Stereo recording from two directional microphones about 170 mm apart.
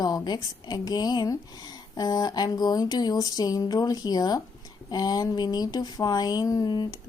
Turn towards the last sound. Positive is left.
turn(degrees=25)  # may be behind; listen again after turning